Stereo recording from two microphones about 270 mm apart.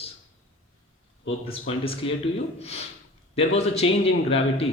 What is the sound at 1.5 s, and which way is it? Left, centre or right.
A man's voice, left.